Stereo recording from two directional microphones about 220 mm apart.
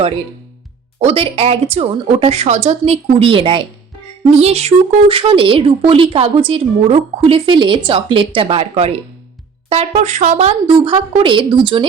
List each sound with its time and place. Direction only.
0.9 s speech: 25° right (ahead or behind)